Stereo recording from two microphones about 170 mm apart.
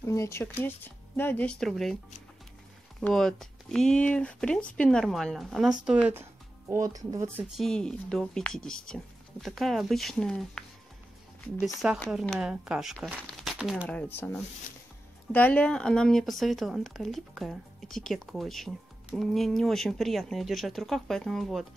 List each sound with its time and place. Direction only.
0.0 s speech: 15° left (ahead or behind)
3.0 s speech: 5° left (ahead or behind)
6.7 s speech: 20° right (ahead or behind)
7.5 s speech: 5° left (ahead or behind)
12.1 s speech: 5° right (ahead or behind)
13.8 s speech: 10° left (ahead or behind)